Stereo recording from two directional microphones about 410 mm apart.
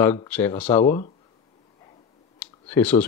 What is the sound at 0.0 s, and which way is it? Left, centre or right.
Speech, centre.